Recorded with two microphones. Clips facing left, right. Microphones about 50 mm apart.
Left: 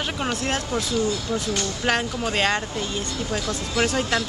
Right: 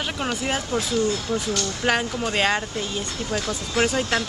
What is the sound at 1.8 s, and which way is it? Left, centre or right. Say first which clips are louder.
Speech: right 1 dB; centre.